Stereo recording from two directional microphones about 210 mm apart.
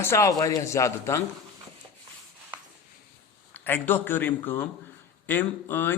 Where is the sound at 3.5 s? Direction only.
10° left (ahead or behind).